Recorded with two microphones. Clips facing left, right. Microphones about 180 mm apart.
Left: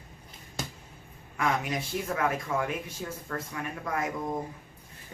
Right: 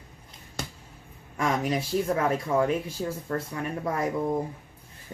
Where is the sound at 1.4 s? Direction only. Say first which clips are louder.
Right 3 dB; 35° right (ahead or behind).